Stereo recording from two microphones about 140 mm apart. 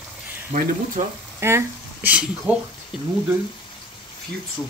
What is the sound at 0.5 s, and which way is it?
Speech, 65° right (ahead or behind).